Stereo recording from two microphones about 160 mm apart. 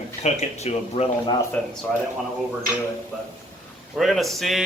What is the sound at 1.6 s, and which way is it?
Speech, 10° left (ahead or behind).